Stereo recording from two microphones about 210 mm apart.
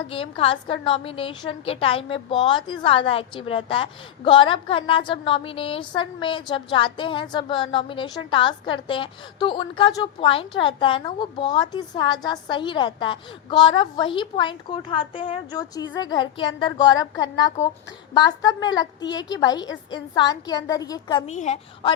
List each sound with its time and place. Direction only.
0.1 s a woman's voice: 25° left (ahead or behind)
21.2 s a woman's voice: 35° left (ahead or behind)